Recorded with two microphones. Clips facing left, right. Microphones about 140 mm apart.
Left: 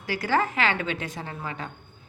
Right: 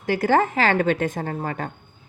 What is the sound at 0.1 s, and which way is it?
A woman's voice, 50° right (ahead or behind).